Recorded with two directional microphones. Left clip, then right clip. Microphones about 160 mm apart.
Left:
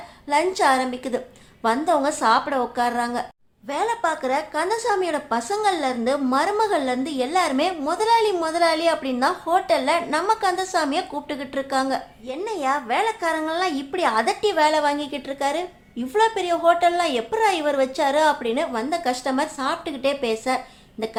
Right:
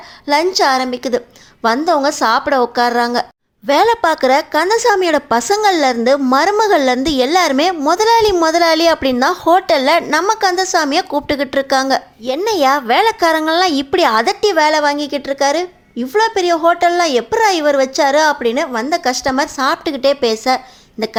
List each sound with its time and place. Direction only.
0.6 s a woman's voice: 35° right (ahead or behind)